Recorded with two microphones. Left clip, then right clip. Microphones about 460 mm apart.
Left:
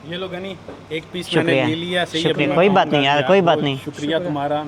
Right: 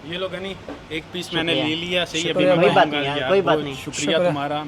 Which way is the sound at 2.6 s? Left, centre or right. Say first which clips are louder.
Left 4 dB; left.